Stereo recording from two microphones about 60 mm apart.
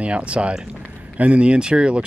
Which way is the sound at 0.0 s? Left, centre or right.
Centre.